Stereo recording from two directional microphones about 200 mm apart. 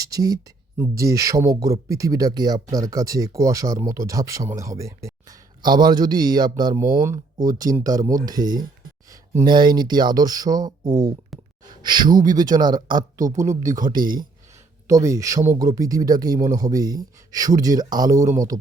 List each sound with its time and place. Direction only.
0.0 s speech: 15° right (ahead or behind)
11.3 s a sound: centre (ahead or behind)
11.7 s speech: 20° right (ahead or behind)